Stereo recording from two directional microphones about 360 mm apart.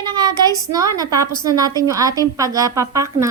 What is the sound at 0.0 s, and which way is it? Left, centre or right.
A woman's voice, centre.